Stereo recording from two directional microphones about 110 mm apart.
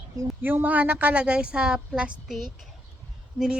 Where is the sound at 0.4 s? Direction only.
15° right (ahead or behind).